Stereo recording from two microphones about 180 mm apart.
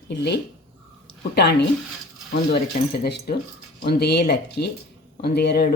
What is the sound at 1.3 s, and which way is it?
Speech, 65° left (ahead or behind).